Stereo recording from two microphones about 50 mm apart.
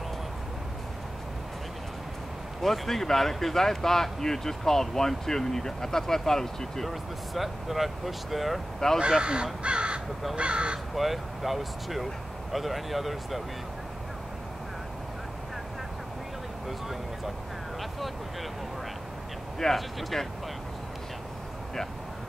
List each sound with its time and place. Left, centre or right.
2.6 s speech: centre
6.9 s speech: centre
8.7 s speech: centre
9.2 s speech: centre
11.0 s speech: centre
19.6 s speech: centre